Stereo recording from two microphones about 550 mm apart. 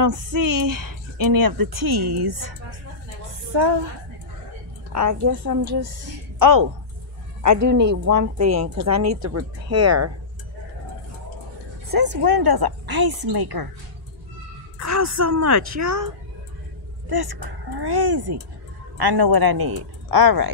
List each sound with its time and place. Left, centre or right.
0.0 s speech: right
3.5 s a woman's voice: right
4.9 s speech: right
12.2 s speech: right
14.8 s speech: right
17.1 s speech: right